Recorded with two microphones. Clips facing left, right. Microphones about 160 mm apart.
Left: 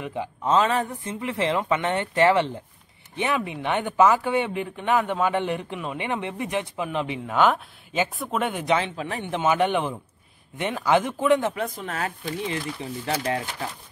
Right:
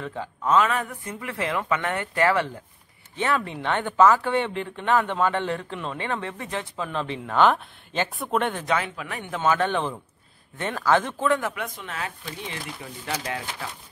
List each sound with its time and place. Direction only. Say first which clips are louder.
0.0 s speech: left 2 dB; 15° left (ahead or behind)
0.5 s speech: even; 30° left (ahead or behind); by 8.6 s 10° left (ahead or behind)
8.6 s speech: left 3 dB; 25° left (ahead or behind)
9.4 s speech: left 1 dB; 15° left (ahead or behind)
11.5 s speech: left 4 dB; 35° left (ahead or behind)